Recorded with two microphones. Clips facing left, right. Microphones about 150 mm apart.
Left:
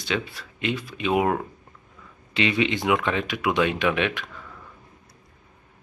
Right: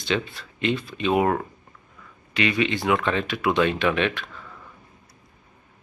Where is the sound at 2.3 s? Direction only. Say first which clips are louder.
Even; 20° left (ahead or behind).